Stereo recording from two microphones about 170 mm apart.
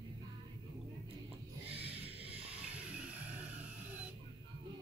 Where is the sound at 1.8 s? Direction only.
35° right (ahead or behind).